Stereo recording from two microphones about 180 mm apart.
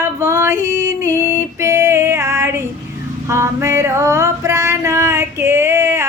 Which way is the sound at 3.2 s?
15° right (ahead or behind).